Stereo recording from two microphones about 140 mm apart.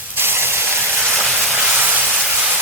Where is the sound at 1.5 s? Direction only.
15° right (ahead or behind).